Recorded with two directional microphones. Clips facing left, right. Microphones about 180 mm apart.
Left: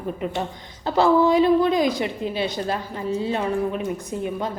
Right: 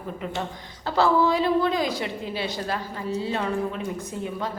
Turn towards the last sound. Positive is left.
turn(degrees=15)  # may be behind; listen again after turning